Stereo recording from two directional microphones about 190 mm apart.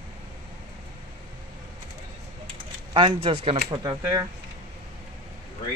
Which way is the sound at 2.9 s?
25° right (ahead or behind).